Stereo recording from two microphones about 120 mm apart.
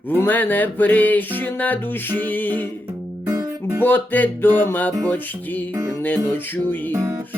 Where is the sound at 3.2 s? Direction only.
25° right (ahead or behind).